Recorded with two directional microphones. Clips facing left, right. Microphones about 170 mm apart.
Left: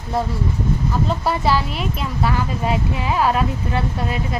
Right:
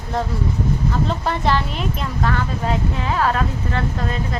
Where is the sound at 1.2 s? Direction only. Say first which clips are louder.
Left 1 dB; 5° left (ahead or behind).